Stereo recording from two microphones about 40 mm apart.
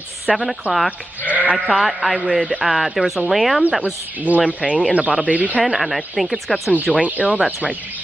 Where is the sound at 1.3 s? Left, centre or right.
Right.